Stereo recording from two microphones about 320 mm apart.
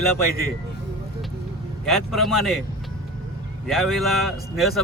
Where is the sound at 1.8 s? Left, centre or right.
Centre.